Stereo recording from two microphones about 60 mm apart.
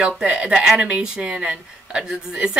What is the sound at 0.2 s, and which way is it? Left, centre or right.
Speech, centre.